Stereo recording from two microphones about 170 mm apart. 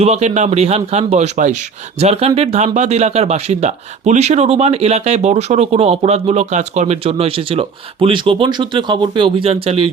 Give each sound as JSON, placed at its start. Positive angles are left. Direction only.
{"t": 0.0, "sound": "speech", "side_deg": -40}